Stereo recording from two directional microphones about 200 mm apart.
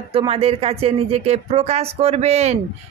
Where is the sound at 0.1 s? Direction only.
30° right (ahead or behind).